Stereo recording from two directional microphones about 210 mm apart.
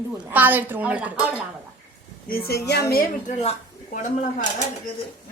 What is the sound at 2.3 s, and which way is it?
A woman's voice, 45° left (ahead or behind).